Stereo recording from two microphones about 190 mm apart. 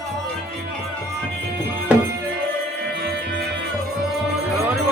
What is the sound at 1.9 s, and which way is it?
Music, 5° right (ahead or behind).